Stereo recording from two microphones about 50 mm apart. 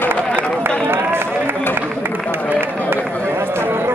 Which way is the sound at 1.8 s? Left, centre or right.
Right.